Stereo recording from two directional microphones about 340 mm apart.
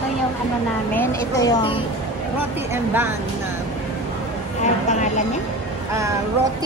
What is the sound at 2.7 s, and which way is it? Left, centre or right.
Speech, centre.